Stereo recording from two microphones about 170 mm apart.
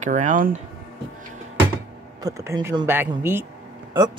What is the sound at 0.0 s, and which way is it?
Speech, 45° right (ahead or behind).